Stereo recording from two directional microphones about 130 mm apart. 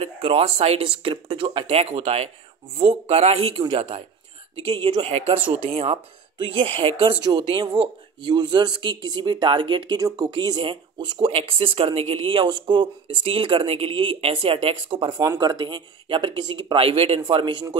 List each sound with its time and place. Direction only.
0.0 s speech: 50° right (ahead or behind)
15.1 s speech: 30° right (ahead or behind)